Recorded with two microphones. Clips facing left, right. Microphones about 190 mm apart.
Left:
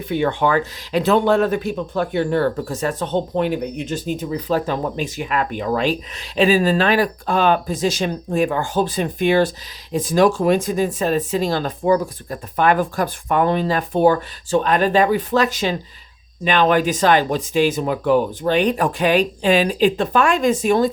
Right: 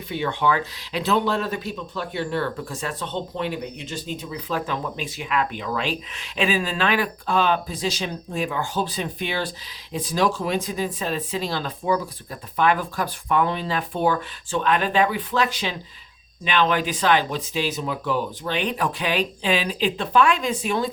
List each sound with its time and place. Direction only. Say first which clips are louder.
0.1 s speech: left 5 dB; 50° left (ahead or behind)